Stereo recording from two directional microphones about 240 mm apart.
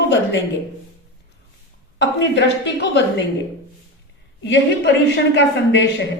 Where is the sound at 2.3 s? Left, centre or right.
Left.